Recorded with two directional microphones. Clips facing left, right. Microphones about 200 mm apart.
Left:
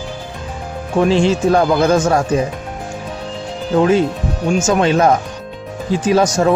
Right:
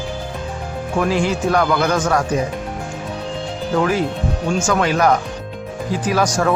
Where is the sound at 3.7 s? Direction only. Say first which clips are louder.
Left 5 dB; 25° left (ahead or behind).